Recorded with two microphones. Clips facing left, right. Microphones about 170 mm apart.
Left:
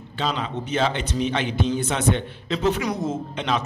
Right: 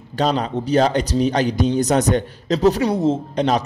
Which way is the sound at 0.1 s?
40° right (ahead or behind).